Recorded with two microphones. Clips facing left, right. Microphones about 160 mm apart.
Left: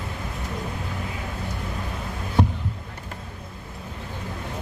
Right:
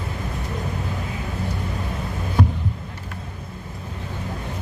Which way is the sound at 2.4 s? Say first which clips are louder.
Even; 30° left (ahead or behind).